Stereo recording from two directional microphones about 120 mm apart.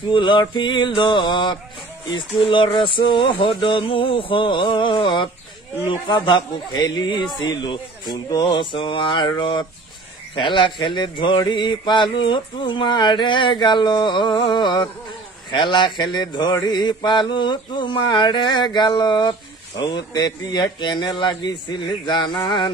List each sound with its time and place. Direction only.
0.1 s mantra: 40° left (ahead or behind)
2.0 s a sound: 45° left (ahead or behind)
5.9 s mantra: 40° left (ahead or behind)